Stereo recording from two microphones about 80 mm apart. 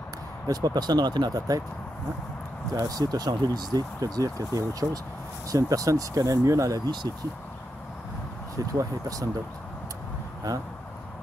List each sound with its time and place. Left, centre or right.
0.5 s speech: right
2.7 s speech: right
8.7 s speech: right